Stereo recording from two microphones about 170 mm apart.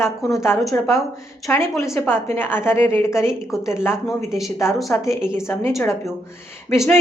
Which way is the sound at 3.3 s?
5° right (ahead or behind).